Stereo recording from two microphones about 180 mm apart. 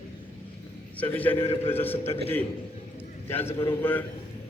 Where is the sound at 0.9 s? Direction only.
10° left (ahead or behind).